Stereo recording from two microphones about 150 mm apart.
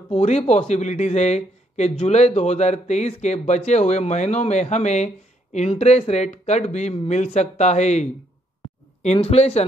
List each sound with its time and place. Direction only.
0.1 s speech: 45° left (ahead or behind)